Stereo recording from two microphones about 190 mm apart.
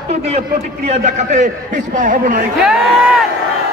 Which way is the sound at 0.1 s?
35° right (ahead or behind).